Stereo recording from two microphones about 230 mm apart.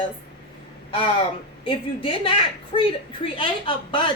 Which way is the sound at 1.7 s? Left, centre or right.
Left.